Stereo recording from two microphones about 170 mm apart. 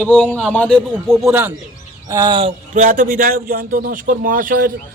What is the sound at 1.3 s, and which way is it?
Speech, 10° right (ahead or behind).